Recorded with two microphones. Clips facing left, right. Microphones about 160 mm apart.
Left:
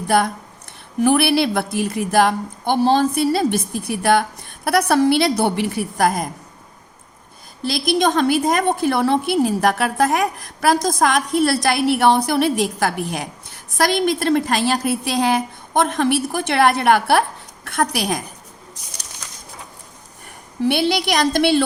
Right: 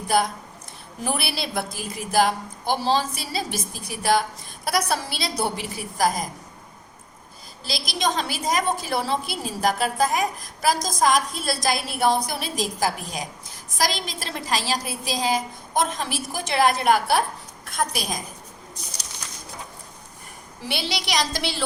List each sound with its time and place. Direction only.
1.0 s a woman's voice: 65° left (ahead or behind)
7.6 s a woman's voice: 55° left (ahead or behind)
20.6 s a woman's voice: 55° left (ahead or behind)